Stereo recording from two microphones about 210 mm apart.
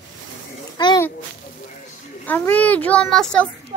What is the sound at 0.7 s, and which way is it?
Babbling, 20° left (ahead or behind).